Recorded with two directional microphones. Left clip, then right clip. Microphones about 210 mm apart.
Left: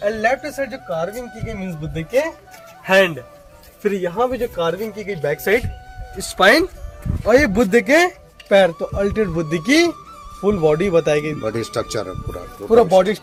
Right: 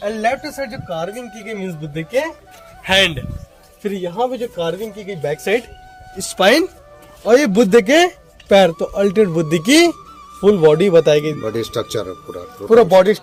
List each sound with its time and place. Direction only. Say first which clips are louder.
0.1 s a man's voice: even; 5° left (ahead or behind)
2.8 s a man's voice: even; 10° right (ahead or behind)
6.1 s speech: even; 35° right (ahead or behind)
7.3 s speech: right 2 dB; 45° right (ahead or behind)
11.3 s a man's voice: right 1 dB; centre (ahead or behind)
12.7 s speech: right 3 dB; 40° right (ahead or behind)